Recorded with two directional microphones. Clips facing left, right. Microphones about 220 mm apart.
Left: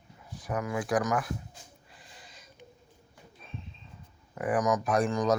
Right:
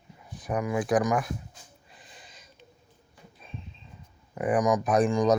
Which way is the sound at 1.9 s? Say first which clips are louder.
Right 1 dB; 20° right (ahead or behind).